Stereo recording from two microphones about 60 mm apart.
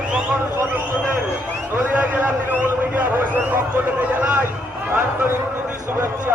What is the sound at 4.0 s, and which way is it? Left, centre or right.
Speech, right.